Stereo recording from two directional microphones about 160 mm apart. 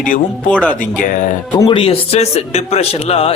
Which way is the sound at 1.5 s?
30° left (ahead or behind).